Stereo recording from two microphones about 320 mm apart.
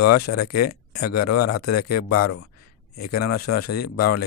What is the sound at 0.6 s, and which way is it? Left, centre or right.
Speech, left.